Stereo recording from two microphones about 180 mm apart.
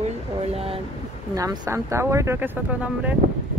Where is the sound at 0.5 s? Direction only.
30° right (ahead or behind).